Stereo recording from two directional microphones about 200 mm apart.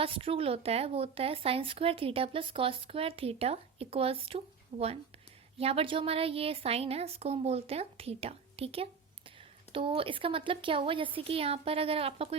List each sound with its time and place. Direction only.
0.0 s a woman's voice: 25° right (ahead or behind)